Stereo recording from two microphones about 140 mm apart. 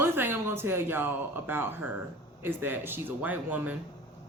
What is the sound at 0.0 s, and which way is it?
Speech, 15° right (ahead or behind).